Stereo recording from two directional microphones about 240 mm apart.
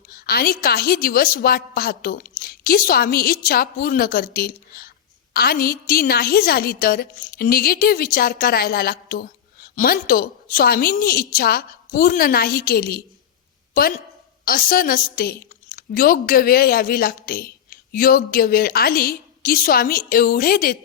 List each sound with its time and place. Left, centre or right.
0.1 s a woman's voice: left